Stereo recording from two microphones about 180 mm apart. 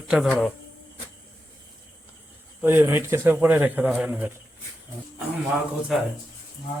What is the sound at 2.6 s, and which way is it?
A man's voice, 10° right (ahead or behind).